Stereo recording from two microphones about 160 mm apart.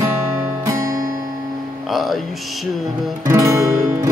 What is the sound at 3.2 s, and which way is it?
Music, 20° right (ahead or behind).